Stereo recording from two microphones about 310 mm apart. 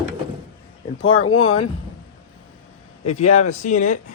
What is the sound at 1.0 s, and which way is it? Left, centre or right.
Speech, left.